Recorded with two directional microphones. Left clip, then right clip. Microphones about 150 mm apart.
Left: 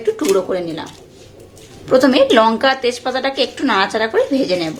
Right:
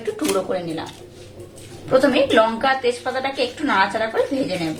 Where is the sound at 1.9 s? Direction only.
70° left (ahead or behind).